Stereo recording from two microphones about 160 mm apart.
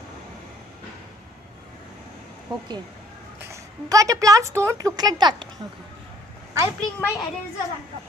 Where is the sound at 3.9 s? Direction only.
20° right (ahead or behind).